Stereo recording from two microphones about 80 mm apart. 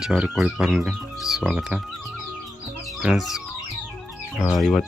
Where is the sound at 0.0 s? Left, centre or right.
Centre.